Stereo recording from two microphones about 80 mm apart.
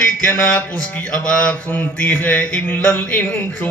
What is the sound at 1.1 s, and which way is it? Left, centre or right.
Speech, centre.